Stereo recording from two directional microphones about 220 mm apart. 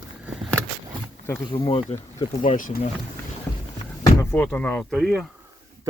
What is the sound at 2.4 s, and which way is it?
Speech, 35° left (ahead or behind).